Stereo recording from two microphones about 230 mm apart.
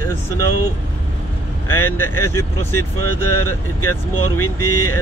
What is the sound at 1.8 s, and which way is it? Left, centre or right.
Speech, centre.